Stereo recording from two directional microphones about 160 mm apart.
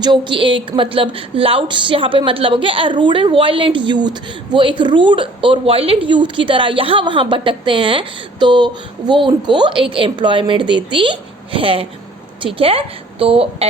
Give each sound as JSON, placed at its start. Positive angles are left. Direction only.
{"t": 0.0, "sound": "a woman's voice", "side_deg": -30}